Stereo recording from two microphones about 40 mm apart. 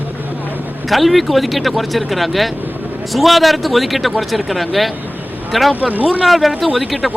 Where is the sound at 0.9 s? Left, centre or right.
Centre.